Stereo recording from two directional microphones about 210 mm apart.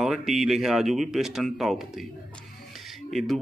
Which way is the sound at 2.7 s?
Centre (ahead or behind).